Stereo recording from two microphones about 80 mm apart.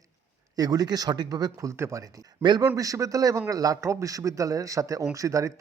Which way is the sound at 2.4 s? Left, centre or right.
Right.